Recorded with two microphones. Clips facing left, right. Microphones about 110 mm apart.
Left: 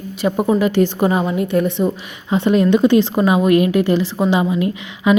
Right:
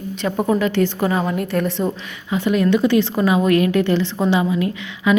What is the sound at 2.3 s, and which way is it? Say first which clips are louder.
A woman's voice: left 3 dB; 30° left (ahead or behind).